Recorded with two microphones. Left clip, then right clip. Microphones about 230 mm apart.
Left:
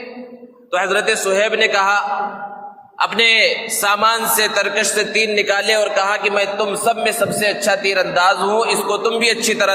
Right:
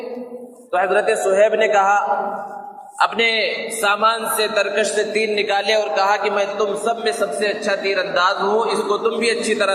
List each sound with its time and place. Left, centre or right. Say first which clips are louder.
0.7 s a man's voice: even; left